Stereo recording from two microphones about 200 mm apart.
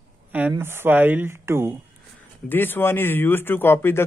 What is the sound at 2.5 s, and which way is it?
Speech, 10° left (ahead or behind).